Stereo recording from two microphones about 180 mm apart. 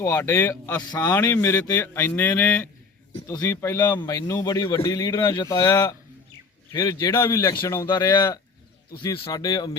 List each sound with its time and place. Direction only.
0.0 s a man's voice: 15° left (ahead or behind)